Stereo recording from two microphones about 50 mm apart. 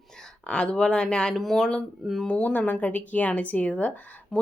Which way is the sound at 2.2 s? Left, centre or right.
Left.